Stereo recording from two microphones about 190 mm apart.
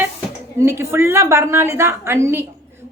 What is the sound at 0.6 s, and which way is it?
Speech, 15° right (ahead or behind).